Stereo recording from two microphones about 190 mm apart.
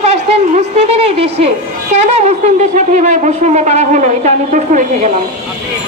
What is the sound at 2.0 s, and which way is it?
A woman's voice, 35° right (ahead or behind).